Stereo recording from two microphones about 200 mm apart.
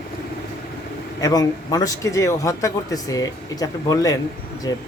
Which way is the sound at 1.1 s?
20° left (ahead or behind).